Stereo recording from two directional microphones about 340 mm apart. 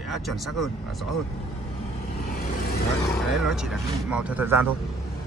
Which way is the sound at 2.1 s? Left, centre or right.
Left.